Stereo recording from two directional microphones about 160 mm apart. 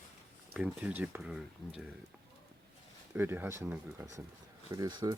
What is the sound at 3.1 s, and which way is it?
Speech, 15° right (ahead or behind).